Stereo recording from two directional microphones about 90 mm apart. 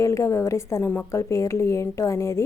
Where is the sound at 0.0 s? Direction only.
35° left (ahead or behind).